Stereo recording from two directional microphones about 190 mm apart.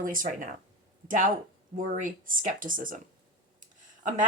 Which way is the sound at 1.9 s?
45° right (ahead or behind).